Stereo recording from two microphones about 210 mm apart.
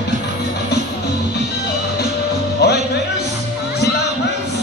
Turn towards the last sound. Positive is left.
turn(degrees=50)  # may be behind; listen again after turning